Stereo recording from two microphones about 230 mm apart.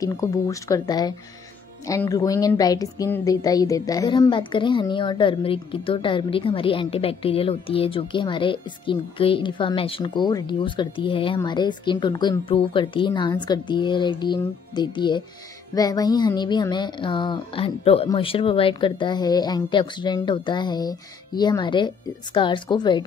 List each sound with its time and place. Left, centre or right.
0.0 s speech: centre